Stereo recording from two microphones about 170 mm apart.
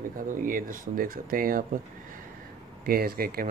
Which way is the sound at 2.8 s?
60° right (ahead or behind).